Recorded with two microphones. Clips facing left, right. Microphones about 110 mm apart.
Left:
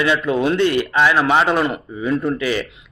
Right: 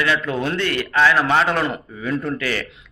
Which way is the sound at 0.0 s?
20° left (ahead or behind).